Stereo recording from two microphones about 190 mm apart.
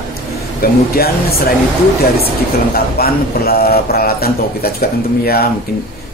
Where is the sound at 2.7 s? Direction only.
55° left (ahead or behind).